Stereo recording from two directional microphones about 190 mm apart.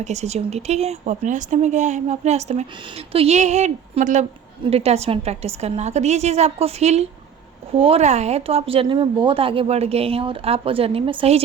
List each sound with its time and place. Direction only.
0.0 s a woman's voice: 35° right (ahead or behind)